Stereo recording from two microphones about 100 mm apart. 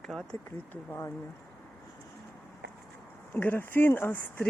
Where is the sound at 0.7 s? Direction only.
20° left (ahead or behind).